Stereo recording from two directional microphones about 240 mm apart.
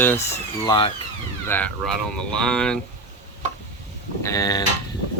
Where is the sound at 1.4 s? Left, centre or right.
Centre.